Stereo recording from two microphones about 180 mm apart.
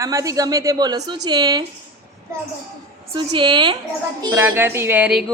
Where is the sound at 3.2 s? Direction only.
25° right (ahead or behind); by 5.2 s 5° right (ahead or behind).